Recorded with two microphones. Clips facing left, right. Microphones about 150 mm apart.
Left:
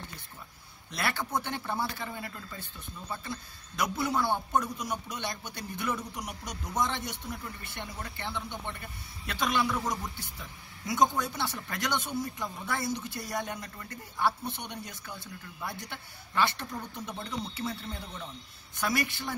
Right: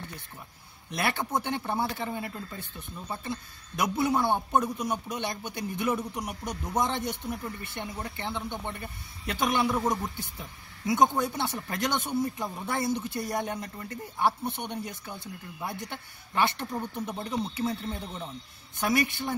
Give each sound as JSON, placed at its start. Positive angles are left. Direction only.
{"t": 0.9, "sound": "a man's voice", "side_deg": -20}